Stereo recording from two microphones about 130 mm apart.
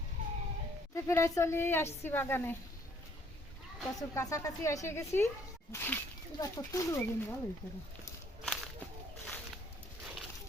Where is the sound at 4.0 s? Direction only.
25° left (ahead or behind).